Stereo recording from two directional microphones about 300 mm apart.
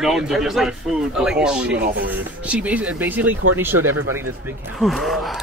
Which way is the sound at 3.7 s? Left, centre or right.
Right.